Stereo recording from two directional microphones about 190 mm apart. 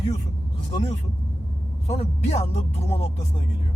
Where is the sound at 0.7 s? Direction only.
25° left (ahead or behind).